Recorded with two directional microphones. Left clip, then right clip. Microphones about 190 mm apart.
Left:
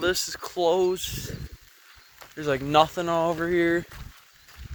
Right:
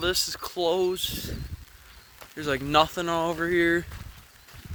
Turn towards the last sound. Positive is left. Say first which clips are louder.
# even
turn(degrees=-25)  # may be behind; listen again after turning